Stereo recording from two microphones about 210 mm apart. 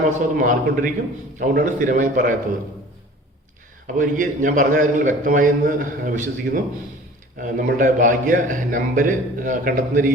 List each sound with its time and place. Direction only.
0.3 s a man's voice: 40° right (ahead or behind)
3.8 s a man's voice: 40° right (ahead or behind)